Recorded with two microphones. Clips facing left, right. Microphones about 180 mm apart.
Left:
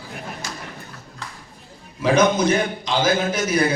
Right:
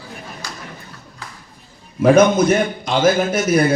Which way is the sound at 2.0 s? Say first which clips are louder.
Right 5 dB; 50° right (ahead or behind).